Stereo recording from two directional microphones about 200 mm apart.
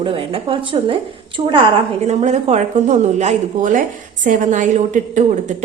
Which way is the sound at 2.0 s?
35° right (ahead or behind).